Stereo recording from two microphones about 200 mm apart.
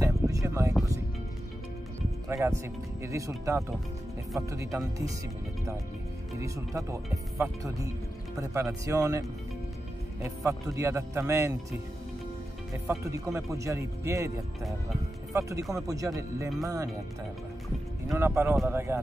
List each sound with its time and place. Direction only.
0.0 s a sound: 15° right (ahead or behind)
2.2 s speech: 15° right (ahead or behind)
6.4 s speech: 15° right (ahead or behind)
10.2 s speech: 15° right (ahead or behind)
13.0 s speech: 15° right (ahead or behind)
15.3 s speech: 15° right (ahead or behind)
18.1 s speech: 10° right (ahead or behind)